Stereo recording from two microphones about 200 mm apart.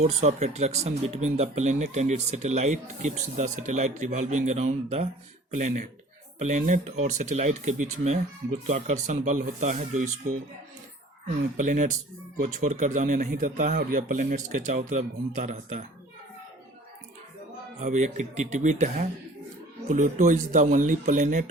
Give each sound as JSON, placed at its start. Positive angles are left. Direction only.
{"t": 0.0, "sound": "speech", "side_deg": -35}
{"t": 6.4, "sound": "speech", "side_deg": -40}
{"t": 11.5, "sound": "speech", "side_deg": -40}
{"t": 17.7, "sound": "speech", "side_deg": -35}